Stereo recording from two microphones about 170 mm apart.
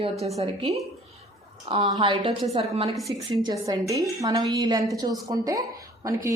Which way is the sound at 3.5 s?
20° right (ahead or behind).